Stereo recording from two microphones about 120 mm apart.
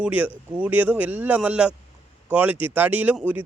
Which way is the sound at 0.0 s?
15° right (ahead or behind).